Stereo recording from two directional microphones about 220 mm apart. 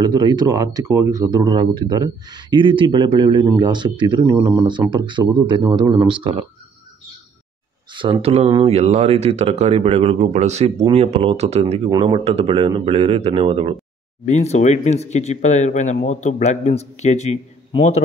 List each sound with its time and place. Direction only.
0.0 s speech: 20° right (ahead or behind)
7.9 s speech: 20° right (ahead or behind)
14.2 s speech: 30° left (ahead or behind)